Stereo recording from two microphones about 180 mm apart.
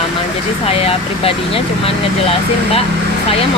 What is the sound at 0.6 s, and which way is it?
Speech, 30° left (ahead or behind).